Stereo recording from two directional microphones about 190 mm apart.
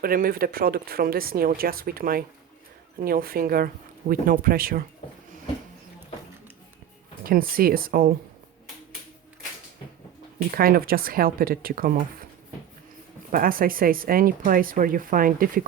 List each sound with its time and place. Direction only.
0.0 s speech: 50° right (ahead or behind)
7.3 s speech: 50° right (ahead or behind)
10.5 s speech: 50° right (ahead or behind)
13.3 s speech: 50° right (ahead or behind)